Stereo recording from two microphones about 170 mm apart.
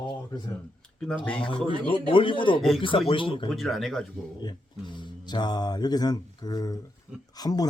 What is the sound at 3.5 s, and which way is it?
Speech, centre (ahead or behind).